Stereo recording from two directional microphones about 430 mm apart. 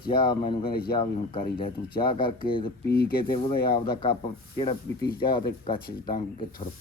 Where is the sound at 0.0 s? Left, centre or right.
Left.